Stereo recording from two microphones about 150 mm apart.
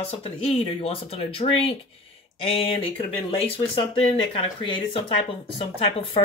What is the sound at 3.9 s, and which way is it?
Speech, 35° left (ahead or behind).